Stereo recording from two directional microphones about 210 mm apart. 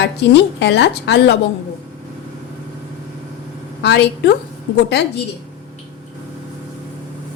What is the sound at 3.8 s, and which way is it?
Speech, 55° left (ahead or behind).